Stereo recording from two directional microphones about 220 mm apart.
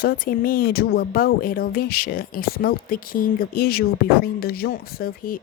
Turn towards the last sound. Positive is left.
turn(degrees=40)  # may be behind; listen again after turning